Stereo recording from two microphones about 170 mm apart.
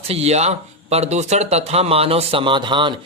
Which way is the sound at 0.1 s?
40° right (ahead or behind).